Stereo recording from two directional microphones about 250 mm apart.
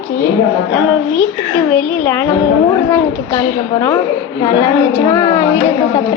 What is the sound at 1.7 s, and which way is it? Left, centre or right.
A woman's voice, centre.